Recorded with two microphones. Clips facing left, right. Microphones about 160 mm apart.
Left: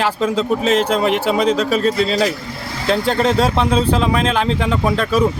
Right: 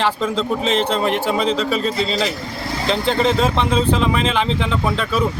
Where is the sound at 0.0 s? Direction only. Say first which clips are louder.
Left 2 dB; 5° left (ahead or behind).